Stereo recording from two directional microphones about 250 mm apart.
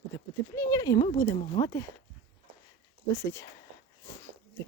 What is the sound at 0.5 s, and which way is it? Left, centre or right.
Speech, centre.